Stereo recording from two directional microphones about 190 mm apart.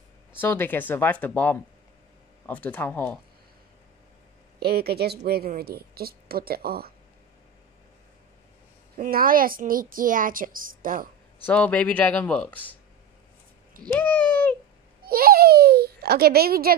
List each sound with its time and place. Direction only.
0.4 s speech: 10° left (ahead or behind)
4.6 s a woman's voice: 55° right (ahead or behind)
8.9 s a woman's voice: 50° right (ahead or behind)
11.4 s speech: 5° left (ahead or behind)
13.9 s a sound: 10° left (ahead or behind)
15.0 s a sound: 50° right (ahead or behind)